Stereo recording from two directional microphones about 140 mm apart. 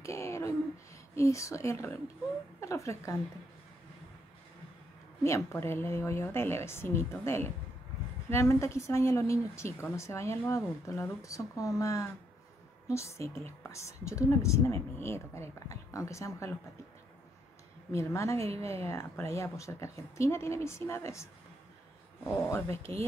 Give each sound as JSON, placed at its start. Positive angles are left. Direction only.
{"t": 0.0, "sound": "a sound", "side_deg": 20}
{"t": 1.1, "sound": "a woman's voice", "side_deg": 20}
{"t": 5.2, "sound": "a woman's voice", "side_deg": 20}
{"t": 17.9, "sound": "a woman's voice", "side_deg": 20}